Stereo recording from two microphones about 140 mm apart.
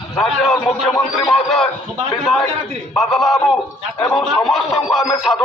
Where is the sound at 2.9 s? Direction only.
Centre (ahead or behind).